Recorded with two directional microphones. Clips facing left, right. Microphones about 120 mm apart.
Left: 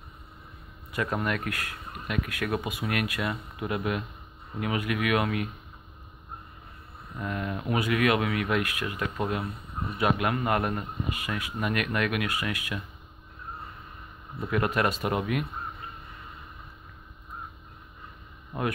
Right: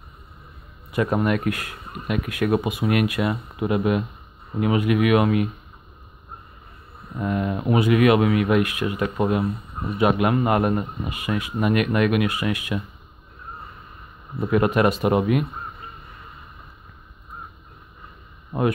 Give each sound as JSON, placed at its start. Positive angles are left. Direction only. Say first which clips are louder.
{"t": 0.9, "sound": "speech", "louder": "right 8 dB", "side_deg": -20}
{"t": 7.2, "sound": "speech", "louder": "right 8 dB", "side_deg": -20}
{"t": 14.4, "sound": "speech", "louder": "right 7 dB", "side_deg": -20}